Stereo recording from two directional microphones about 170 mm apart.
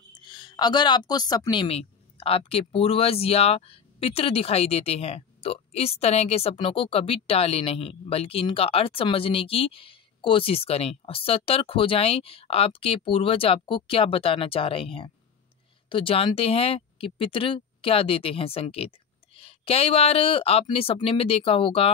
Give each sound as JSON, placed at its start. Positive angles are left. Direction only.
{"t": 0.2, "sound": "a woman's voice", "side_deg": 25}